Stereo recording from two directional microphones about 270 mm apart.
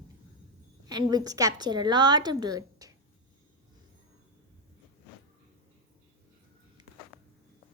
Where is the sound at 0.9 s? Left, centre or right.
Centre.